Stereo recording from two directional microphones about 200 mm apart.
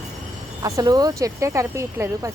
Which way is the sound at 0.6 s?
15° right (ahead or behind).